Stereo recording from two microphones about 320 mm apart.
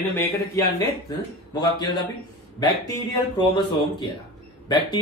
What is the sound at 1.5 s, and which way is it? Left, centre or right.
Speech, centre.